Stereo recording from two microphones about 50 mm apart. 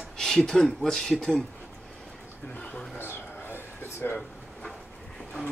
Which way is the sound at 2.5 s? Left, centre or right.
Left.